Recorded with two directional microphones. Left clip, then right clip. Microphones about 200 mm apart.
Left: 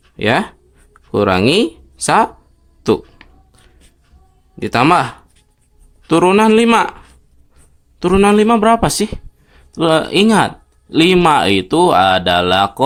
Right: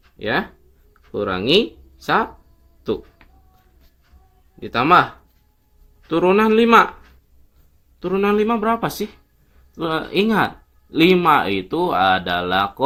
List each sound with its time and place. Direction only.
0.2 s speech: 40° left (ahead or behind)
4.6 s speech: 40° left (ahead or behind)
6.1 s speech: 40° left (ahead or behind)
7.9 s speech: 40° left (ahead or behind)